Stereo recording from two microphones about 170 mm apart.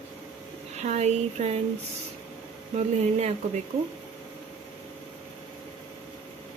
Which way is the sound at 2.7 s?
40° right (ahead or behind).